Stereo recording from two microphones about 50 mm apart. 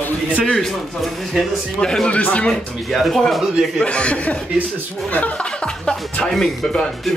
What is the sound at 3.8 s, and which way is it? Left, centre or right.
Speech, left.